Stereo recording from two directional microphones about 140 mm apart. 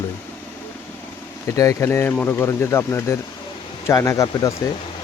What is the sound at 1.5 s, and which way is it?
Speech, 20° left (ahead or behind).